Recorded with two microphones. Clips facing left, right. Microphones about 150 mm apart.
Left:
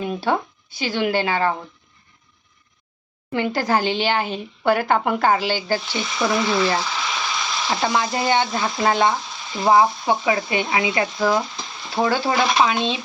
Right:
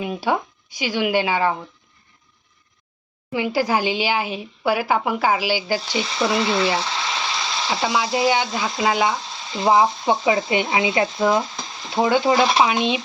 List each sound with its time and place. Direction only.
0.0 s a woman's voice: 10° right (ahead or behind)
3.3 s a woman's voice: 5° right (ahead or behind)
6.0 s speech: 30° right (ahead or behind)
6.7 s a sound: 25° right (ahead or behind)
7.7 s a woman's voice: 5° right (ahead or behind)
9.5 s speech: 20° right (ahead or behind)